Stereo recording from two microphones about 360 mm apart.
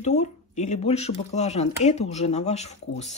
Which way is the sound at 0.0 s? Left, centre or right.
Centre.